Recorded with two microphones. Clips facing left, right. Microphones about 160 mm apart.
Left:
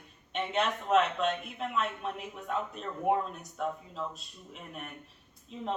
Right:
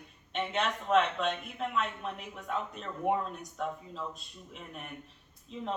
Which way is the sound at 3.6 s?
Centre (ahead or behind).